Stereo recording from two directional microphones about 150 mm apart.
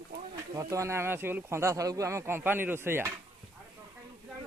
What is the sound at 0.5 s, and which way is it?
Speech, 20° right (ahead or behind).